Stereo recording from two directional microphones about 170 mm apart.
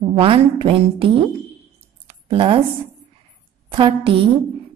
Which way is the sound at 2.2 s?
35° right (ahead or behind).